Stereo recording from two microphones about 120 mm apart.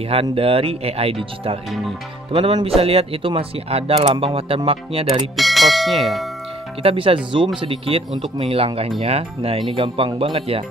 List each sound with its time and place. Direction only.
0.1 s speech: 50° right (ahead or behind)
2.3 s speech: 50° right (ahead or behind)
5.3 s speech: centre (ahead or behind)
6.8 s speech: 50° right (ahead or behind)